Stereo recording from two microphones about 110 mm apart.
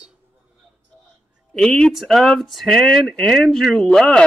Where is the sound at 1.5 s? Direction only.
5° left (ahead or behind).